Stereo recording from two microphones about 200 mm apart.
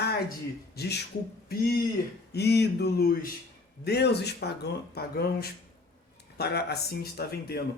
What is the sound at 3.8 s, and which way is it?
Speech, 55° left (ahead or behind).